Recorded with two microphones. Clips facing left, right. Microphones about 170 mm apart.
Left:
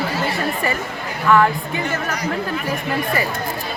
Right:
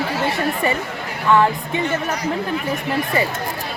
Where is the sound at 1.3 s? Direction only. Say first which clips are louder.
Even; 20° right (ahead or behind).